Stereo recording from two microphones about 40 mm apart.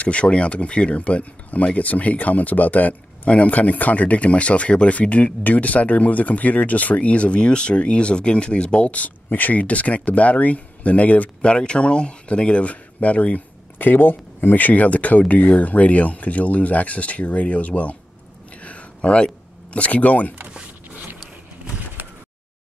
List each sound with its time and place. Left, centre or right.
0.0 s speech: left
8.8 s speech: left
11.4 s speech: left
13.7 s speech: left
18.6 s a sound: left